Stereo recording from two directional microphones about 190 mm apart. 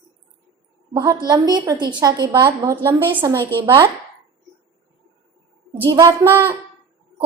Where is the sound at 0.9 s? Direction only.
15° right (ahead or behind).